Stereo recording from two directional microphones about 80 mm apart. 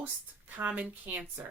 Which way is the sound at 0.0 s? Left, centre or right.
Right.